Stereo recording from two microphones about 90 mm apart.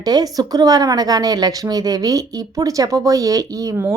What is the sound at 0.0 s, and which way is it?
A woman's voice, 45° right (ahead or behind).